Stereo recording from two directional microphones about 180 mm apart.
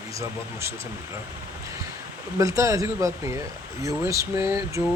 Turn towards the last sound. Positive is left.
turn(degrees=-15)  # may be behind; listen again after turning